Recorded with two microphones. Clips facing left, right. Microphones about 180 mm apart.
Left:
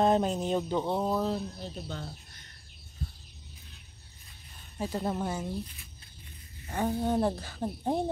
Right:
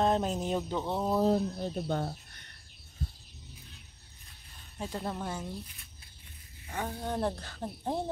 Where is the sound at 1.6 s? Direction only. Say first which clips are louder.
Right 7 dB; 55° right (ahead or behind).